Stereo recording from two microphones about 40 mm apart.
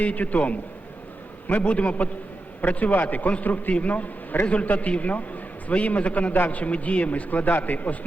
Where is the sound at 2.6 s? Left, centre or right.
Left.